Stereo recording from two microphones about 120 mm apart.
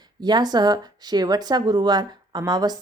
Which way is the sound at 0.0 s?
35° right (ahead or behind).